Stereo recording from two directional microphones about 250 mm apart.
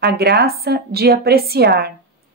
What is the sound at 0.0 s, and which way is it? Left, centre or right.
A woman's voice, right.